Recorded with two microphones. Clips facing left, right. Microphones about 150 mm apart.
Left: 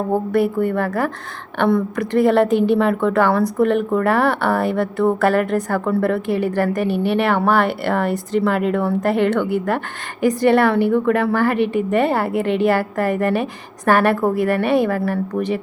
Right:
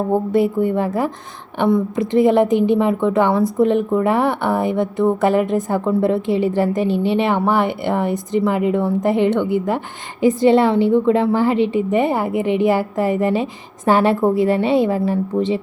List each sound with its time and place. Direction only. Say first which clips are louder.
0.3 s a woman's voice: right 1 dB; 20° right (ahead or behind)